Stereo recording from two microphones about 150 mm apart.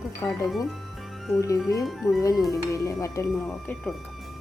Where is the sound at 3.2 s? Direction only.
5° left (ahead or behind).